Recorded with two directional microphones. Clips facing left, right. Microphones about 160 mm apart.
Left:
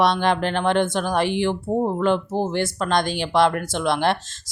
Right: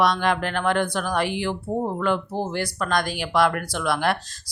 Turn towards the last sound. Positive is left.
turn(degrees=25)  # may be behind; listen again after turning